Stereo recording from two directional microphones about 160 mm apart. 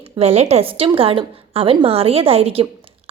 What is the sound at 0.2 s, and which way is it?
A woman's voice, 40° right (ahead or behind).